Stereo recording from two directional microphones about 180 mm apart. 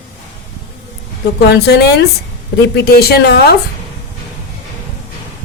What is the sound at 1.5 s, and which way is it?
A woman's voice, 65° left (ahead or behind).